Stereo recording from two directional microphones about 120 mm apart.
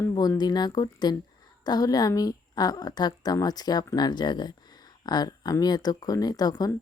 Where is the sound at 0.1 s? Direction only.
35° left (ahead or behind).